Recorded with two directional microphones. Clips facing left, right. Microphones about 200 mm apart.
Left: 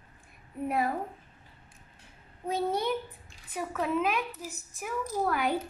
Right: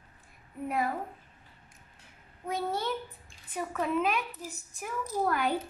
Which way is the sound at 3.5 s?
5° left (ahead or behind).